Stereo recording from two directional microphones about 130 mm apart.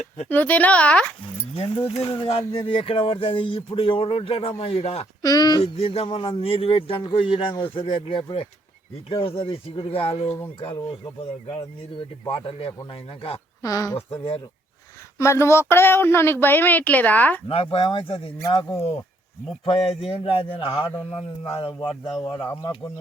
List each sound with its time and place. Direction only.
0.3 s speech: 15° left (ahead or behind)
1.5 s a man's voice: 45° left (ahead or behind)
5.2 s speech: 30° left (ahead or behind)
5.6 s a man's voice: 50° left (ahead or behind)
10.8 s a man's voice: 35° left (ahead or behind)
13.6 s speech: 25° left (ahead or behind)
14.1 s speech: 40° left (ahead or behind)
15.2 s speech: 20° left (ahead or behind)
17.5 s a man's voice: 45° left (ahead or behind)
18.7 s speech: 20° left (ahead or behind)
19.6 s a man's voice: 45° left (ahead or behind)